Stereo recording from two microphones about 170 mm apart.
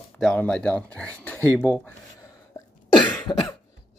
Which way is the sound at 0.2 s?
5° left (ahead or behind).